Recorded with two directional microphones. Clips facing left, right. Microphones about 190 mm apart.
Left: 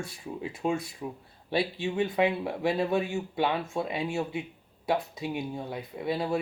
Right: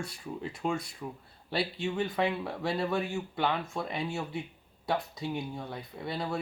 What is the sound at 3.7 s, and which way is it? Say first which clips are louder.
Speech: left 4 dB; 25° left (ahead or behind).